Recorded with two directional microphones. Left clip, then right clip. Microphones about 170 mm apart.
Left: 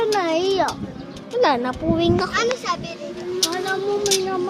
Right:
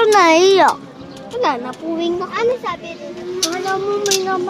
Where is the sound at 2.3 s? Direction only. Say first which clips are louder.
Right 3 dB; 45° right (ahead or behind).